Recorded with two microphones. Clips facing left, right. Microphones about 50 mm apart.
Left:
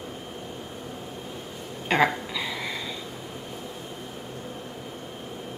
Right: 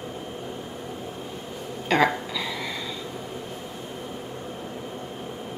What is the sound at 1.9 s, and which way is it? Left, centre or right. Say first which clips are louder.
Speech: right 1 dB; left.